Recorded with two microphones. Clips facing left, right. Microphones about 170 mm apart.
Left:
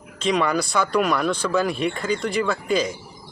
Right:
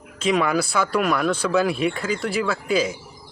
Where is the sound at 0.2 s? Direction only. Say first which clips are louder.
Right 1 dB; 5° right (ahead or behind).